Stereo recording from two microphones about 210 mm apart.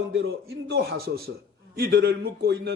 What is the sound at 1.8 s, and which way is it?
Speech, 50° right (ahead or behind).